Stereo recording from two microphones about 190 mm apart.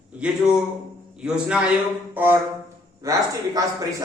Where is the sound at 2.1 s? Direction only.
10° right (ahead or behind).